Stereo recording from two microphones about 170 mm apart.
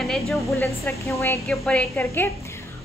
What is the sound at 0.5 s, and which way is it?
Speech, 15° left (ahead or behind).